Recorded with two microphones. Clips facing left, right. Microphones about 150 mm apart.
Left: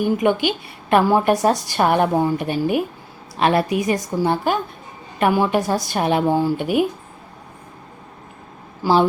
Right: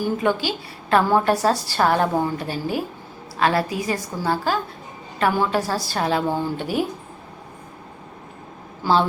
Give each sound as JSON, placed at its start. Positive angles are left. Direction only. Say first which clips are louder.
{"t": 0.0, "sound": "a woman's voice", "louder": "left 4 dB", "side_deg": 20}
{"t": 8.8, "sound": "a woman's voice", "louder": "left 3 dB", "side_deg": 15}